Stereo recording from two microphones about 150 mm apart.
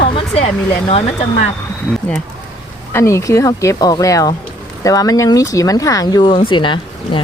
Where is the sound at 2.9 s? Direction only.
20° left (ahead or behind); by 7.2 s 35° left (ahead or behind).